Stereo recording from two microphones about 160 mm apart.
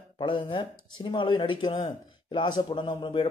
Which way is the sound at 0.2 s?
30° left (ahead or behind).